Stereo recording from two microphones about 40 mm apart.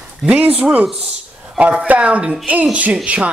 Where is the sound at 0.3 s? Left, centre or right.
Right.